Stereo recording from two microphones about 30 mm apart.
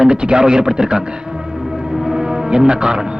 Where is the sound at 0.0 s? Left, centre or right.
Right.